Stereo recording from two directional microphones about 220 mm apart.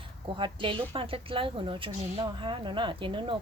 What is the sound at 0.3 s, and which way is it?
A woman's voice, 25° right (ahead or behind).